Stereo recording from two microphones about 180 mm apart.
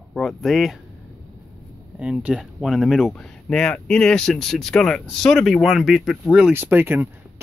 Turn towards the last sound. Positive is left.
turn(degrees=-10)  # may be behind; listen again after turning